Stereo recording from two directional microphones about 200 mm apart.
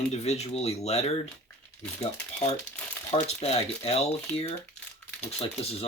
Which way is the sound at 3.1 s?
30° left (ahead or behind).